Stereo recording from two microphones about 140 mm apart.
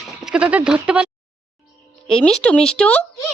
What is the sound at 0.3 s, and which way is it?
Speech, 10° right (ahead or behind).